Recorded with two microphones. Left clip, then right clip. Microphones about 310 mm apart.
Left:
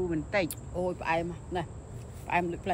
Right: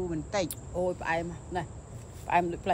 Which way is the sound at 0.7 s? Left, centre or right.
Right.